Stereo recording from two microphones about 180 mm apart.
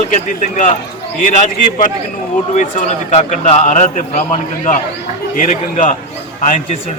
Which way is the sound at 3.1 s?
40° left (ahead or behind).